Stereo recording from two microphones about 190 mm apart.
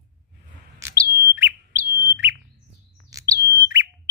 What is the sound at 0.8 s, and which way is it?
Bird, 15° right (ahead or behind).